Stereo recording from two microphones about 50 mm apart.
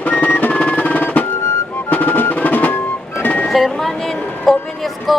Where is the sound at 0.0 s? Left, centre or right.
Left.